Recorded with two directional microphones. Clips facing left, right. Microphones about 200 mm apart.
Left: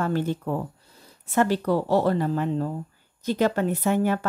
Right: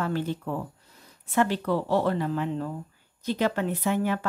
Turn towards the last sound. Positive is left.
turn(degrees=45)  # may be behind; listen again after turning